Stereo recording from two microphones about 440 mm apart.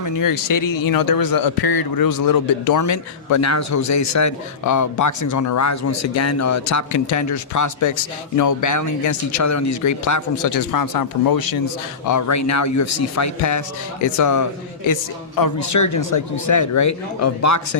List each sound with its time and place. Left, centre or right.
0.0 s speech: left